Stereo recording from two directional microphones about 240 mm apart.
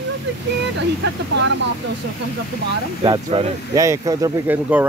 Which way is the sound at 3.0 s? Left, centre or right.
Centre.